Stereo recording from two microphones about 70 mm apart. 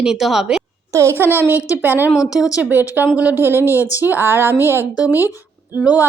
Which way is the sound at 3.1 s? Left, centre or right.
Right.